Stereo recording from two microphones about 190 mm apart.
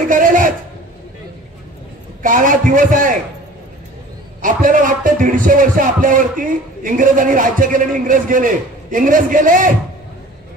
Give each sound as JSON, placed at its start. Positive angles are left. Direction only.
{"t": 0.1, "sound": "a sound", "side_deg": -45}
{"t": 2.2, "sound": "speech", "side_deg": -45}
{"t": 4.4, "sound": "speech", "side_deg": -45}